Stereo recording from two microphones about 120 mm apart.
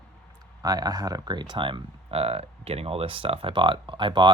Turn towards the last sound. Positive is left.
turn(degrees=-45)  # may be behind; listen again after turning